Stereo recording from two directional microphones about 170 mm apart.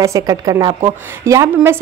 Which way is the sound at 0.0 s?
20° right (ahead or behind).